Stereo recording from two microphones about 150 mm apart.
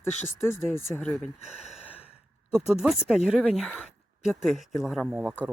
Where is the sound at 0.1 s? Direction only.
50° left (ahead or behind).